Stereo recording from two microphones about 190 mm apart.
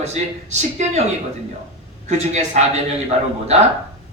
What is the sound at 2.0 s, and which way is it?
Speech, 35° right (ahead or behind).